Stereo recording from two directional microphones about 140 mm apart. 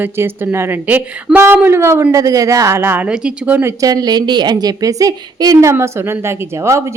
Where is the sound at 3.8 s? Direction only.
25° right (ahead or behind).